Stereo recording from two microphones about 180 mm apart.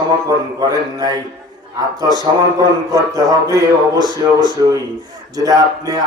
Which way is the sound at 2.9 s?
20° right (ahead or behind).